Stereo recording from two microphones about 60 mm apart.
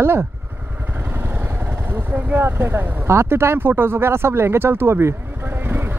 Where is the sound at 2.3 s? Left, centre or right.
Right.